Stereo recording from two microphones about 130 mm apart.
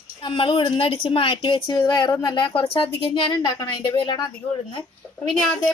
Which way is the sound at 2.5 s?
45° left (ahead or behind).